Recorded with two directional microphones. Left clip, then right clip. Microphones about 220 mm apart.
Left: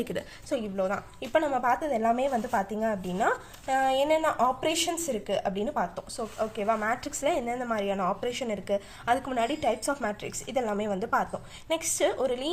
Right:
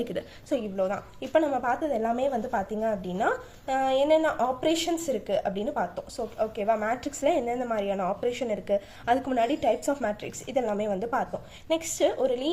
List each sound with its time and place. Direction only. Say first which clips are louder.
0.0 s a woman's voice: right 1 dB; 25° left (ahead or behind)